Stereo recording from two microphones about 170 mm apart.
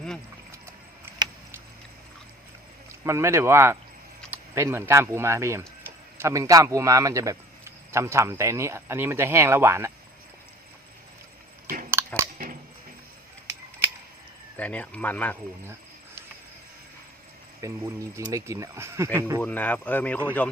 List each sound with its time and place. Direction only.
0.5 s a sound: 15° right (ahead or behind)
3.0 s speech: 15° right (ahead or behind)
11.9 s chewing: 15° right (ahead or behind)
14.5 s speech: 10° left (ahead or behind)
17.6 s speech: 15° right (ahead or behind)
19.4 s speech: 10° left (ahead or behind)